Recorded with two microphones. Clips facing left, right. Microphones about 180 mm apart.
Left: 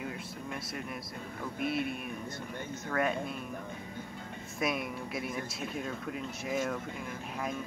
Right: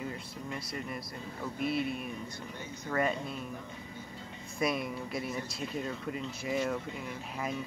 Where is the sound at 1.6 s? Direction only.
50° left (ahead or behind).